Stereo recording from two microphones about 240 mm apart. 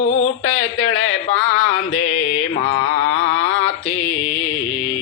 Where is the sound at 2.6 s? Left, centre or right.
Left.